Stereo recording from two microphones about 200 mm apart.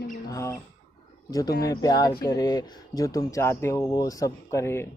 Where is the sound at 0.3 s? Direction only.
15° left (ahead or behind).